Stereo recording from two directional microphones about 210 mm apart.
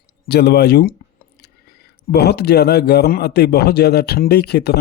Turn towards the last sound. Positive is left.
turn(degrees=50)  # may be behind; listen again after turning